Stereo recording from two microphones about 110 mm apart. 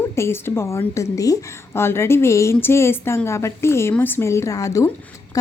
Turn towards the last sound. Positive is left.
turn(degrees=30)  # may be behind; listen again after turning